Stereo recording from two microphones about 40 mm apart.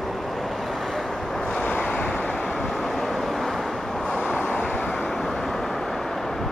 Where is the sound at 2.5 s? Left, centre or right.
Centre.